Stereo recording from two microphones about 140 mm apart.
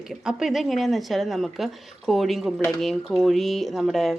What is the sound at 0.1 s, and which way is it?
Speech, 5° right (ahead or behind).